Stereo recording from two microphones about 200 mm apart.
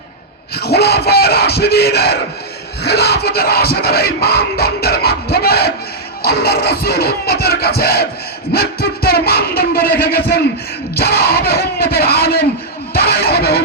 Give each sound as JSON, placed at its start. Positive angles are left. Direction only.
{"t": 0.5, "sound": "yell", "side_deg": 50}
{"t": 2.8, "sound": "music", "side_deg": 55}